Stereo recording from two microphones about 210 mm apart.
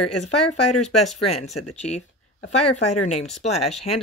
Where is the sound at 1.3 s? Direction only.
30° left (ahead or behind).